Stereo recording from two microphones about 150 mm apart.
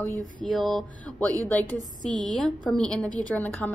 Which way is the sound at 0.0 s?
25° right (ahead or behind).